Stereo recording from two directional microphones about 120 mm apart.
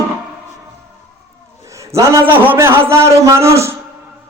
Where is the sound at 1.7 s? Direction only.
25° right (ahead or behind).